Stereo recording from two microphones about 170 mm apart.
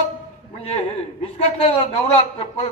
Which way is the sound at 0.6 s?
40° left (ahead or behind).